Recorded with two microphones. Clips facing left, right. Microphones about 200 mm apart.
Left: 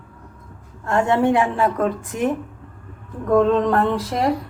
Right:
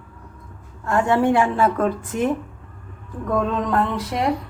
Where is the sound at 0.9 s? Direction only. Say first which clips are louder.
Left 1 dB; 20° left (ahead or behind).